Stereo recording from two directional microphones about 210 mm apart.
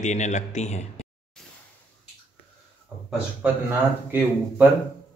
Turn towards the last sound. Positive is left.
turn(degrees=-10)  # may be behind; listen again after turning